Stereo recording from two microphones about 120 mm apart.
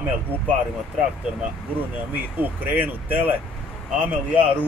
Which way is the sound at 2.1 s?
15° right (ahead or behind).